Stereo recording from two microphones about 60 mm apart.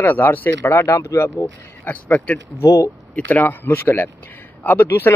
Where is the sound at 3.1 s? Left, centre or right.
Left.